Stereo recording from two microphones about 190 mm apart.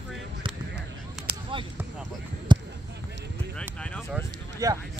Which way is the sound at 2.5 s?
25° right (ahead or behind).